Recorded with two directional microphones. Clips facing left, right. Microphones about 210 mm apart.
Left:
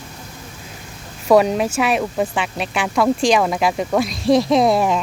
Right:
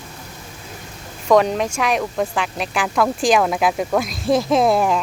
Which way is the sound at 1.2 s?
5° left (ahead or behind).